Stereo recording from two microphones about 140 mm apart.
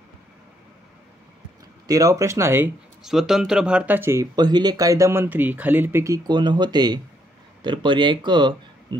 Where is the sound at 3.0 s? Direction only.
5° right (ahead or behind).